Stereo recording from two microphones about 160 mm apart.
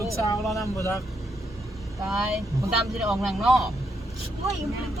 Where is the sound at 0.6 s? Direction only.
20° left (ahead or behind).